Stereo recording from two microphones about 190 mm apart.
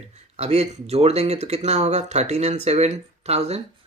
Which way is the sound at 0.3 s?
35° right (ahead or behind).